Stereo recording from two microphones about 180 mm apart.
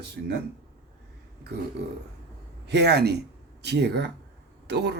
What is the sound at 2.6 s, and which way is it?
Speech, 65° right (ahead or behind).